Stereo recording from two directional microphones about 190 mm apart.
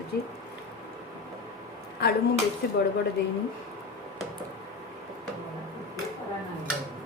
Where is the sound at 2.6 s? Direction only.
55° left (ahead or behind).